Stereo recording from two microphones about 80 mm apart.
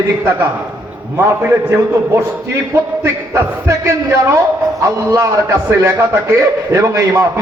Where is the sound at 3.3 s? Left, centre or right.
Right.